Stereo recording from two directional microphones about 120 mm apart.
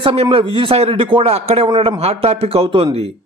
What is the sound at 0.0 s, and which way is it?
A man's voice, 50° right (ahead or behind).